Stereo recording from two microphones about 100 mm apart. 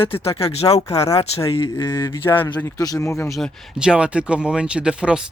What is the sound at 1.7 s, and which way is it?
Speech, 40° left (ahead or behind).